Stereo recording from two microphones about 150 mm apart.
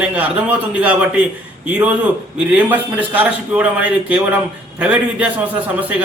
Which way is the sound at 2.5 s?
10° right (ahead or behind).